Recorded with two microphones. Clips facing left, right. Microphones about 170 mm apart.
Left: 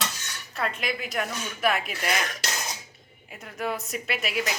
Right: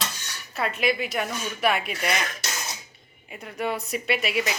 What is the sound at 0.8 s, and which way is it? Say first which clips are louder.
Speech: right 5 dB; centre (ahead or behind).